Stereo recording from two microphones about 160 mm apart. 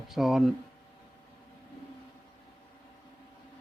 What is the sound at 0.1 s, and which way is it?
Speech, centre (ahead or behind).